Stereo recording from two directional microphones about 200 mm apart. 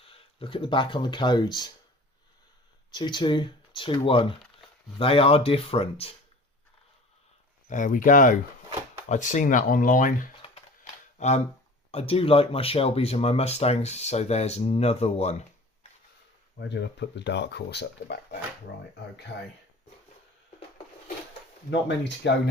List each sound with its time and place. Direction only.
0.0 s speech: 25° left (ahead or behind)
2.9 s speech: 20° left (ahead or behind)
7.7 s speech: 40° left (ahead or behind)
16.6 s speech: 60° left (ahead or behind)
21.7 s speech: 60° left (ahead or behind)